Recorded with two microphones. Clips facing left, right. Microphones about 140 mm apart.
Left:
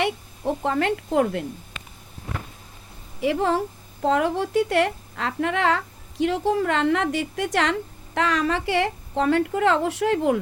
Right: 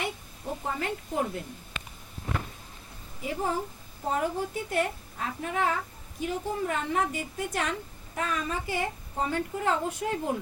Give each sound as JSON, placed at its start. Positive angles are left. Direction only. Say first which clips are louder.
{"t": 0.0, "sound": "a woman's voice", "louder": "left 10 dB", "side_deg": 75}
{"t": 3.2, "sound": "a woman's voice", "louder": "left 8 dB", "side_deg": 75}